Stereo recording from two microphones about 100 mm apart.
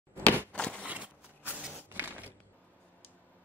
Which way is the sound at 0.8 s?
15° right (ahead or behind).